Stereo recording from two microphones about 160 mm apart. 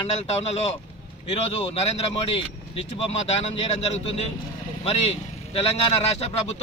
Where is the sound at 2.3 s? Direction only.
35° left (ahead or behind).